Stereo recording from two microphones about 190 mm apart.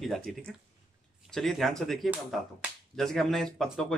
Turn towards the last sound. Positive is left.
turn(degrees=0)  # may be behind; listen again after turning